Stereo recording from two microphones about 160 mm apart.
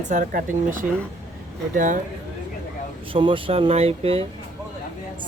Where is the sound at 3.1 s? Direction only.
30° right (ahead or behind).